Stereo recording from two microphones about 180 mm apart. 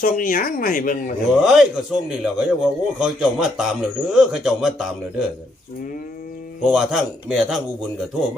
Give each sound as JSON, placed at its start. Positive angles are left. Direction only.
{"t": 0.0, "sound": "speech", "side_deg": 50}
{"t": 1.4, "sound": "a man's voice", "side_deg": 0}
{"t": 6.7, "sound": "a man's voice", "side_deg": -5}